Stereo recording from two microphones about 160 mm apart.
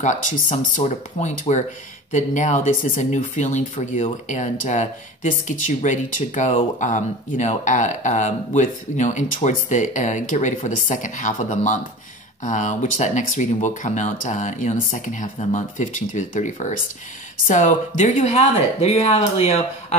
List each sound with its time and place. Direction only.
0.0 s speech: 55° left (ahead or behind)